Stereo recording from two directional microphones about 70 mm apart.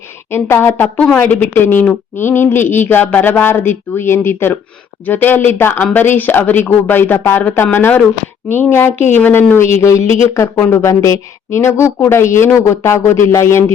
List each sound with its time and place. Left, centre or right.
0.3 s speech: left
0.7 s speech: left
2.1 s speech: left